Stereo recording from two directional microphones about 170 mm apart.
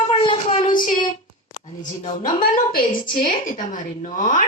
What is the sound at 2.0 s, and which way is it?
Speech, 40° left (ahead or behind).